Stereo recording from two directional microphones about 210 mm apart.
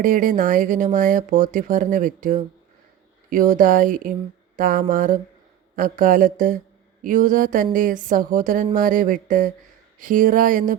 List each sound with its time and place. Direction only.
0.0 s speech: 40° right (ahead or behind)